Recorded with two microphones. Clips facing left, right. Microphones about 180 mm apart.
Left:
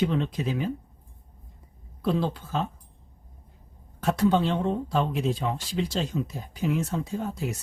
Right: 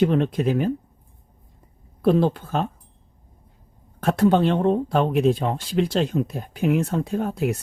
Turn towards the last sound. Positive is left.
turn(degrees=-60)  # may be behind; listen again after turning